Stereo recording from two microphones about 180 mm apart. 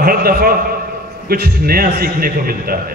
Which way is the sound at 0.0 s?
55° right (ahead or behind).